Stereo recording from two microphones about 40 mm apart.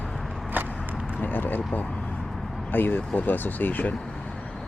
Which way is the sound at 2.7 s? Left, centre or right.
Left.